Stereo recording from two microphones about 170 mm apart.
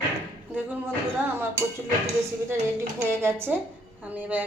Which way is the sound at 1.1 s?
15° right (ahead or behind).